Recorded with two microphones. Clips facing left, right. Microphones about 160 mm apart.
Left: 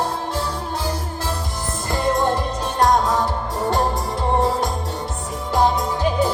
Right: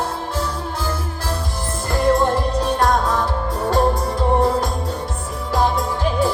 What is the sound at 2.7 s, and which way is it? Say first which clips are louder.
Music: left 4 dB; 20° left (ahead or behind).